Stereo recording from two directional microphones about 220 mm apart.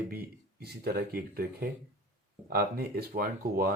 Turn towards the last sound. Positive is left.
turn(degrees=-40)  # may be behind; listen again after turning